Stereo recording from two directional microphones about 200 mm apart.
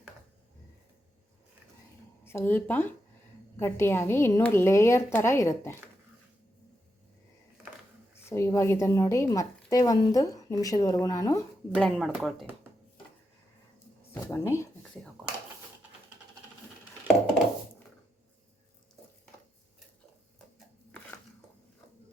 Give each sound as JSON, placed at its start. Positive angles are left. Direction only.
{"t": 2.2, "sound": "a woman's voice", "side_deg": 10}
{"t": 8.3, "sound": "a woman's voice", "side_deg": 15}
{"t": 11.7, "sound": "speech", "side_deg": 5}
{"t": 14.1, "sound": "a woman's voice", "side_deg": 10}